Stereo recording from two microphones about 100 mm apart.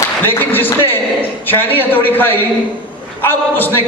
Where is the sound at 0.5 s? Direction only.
20° left (ahead or behind).